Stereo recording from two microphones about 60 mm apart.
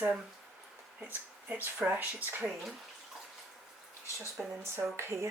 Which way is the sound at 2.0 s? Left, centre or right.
Right.